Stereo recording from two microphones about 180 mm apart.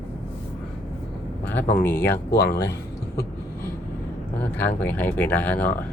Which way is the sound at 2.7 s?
60° left (ahead or behind).